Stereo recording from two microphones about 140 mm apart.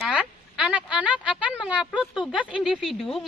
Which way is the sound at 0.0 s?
5° right (ahead or behind).